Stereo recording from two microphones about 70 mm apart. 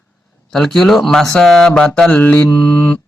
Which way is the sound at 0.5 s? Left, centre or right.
Centre.